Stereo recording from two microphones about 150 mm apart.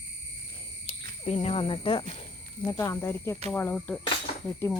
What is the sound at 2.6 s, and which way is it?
Speech, 25° left (ahead or behind).